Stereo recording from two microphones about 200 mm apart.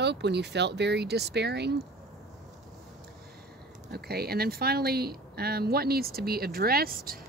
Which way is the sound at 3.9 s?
50° right (ahead or behind).